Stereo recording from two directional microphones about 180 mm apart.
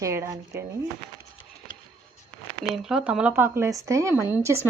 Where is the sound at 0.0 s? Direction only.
15° right (ahead or behind).